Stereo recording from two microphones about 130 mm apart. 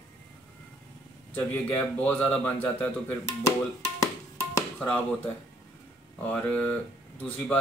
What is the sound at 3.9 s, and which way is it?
Music, 25° left (ahead or behind).